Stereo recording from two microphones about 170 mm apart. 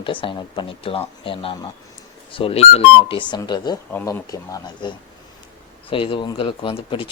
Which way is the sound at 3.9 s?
10° left (ahead or behind).